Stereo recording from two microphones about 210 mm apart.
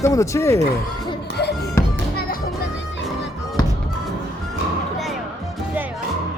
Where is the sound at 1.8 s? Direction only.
10° left (ahead or behind).